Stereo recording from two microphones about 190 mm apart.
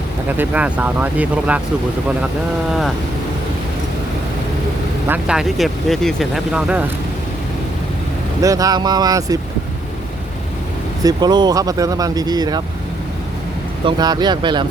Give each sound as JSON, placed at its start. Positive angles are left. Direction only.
{"t": 0.3, "sound": "speech", "side_deg": -10}
{"t": 5.0, "sound": "speech", "side_deg": -5}
{"t": 8.4, "sound": "speech", "side_deg": -15}
{"t": 11.0, "sound": "speech", "side_deg": -20}
{"t": 13.8, "sound": "speech", "side_deg": -20}